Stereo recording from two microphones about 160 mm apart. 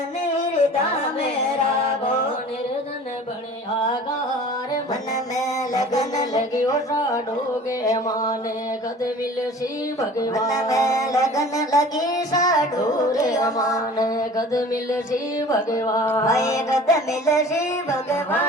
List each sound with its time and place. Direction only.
4.7 s music: 25° left (ahead or behind)
10.0 s music: 20° left (ahead or behind)